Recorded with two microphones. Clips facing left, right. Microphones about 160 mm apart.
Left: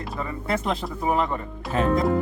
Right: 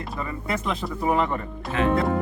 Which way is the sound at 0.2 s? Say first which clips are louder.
Left 2 dB; 30° left (ahead or behind).